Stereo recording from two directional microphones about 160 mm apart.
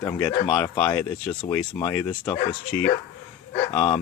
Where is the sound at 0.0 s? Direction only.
10° left (ahead or behind).